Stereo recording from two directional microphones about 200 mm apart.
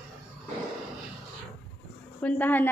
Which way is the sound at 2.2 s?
10° left (ahead or behind).